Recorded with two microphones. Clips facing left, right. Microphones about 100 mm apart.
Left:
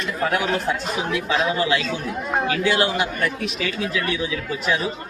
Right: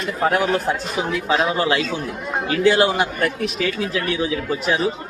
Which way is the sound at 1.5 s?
30° right (ahead or behind).